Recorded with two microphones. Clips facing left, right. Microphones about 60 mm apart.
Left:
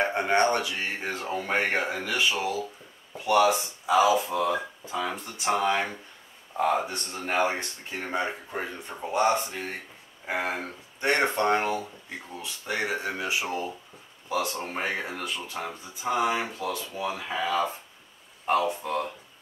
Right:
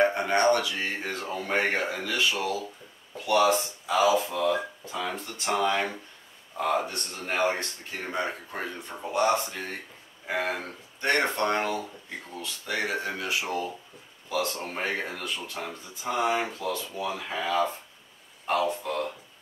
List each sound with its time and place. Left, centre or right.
0.0 s speech: left